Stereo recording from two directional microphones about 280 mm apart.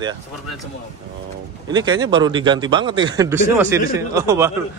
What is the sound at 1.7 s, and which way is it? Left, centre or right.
Speech, centre.